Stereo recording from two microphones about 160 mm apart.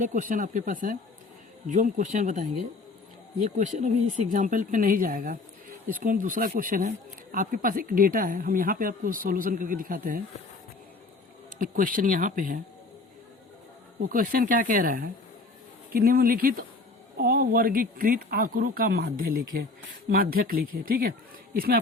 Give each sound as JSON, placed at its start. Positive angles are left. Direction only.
{"t": 0.0, "sound": "speech", "side_deg": -55}
{"t": 11.6, "sound": "speech", "side_deg": -60}
{"t": 14.1, "sound": "speech", "side_deg": -60}